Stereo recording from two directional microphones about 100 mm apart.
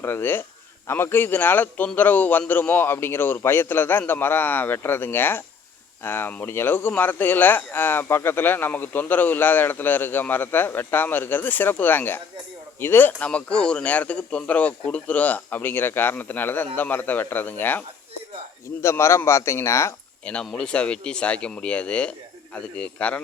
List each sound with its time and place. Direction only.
0.0 s speech: 25° left (ahead or behind)
20.2 s speech: 10° left (ahead or behind)